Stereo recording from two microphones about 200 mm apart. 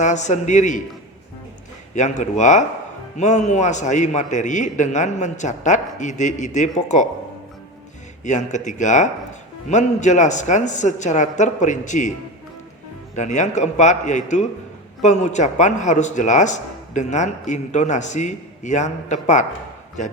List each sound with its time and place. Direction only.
0.0 s a man's voice: 35° left (ahead or behind)
2.0 s a man's voice: 35° left (ahead or behind)
8.2 s a man's voice: 35° left (ahead or behind)
13.1 s a man's voice: 35° left (ahead or behind)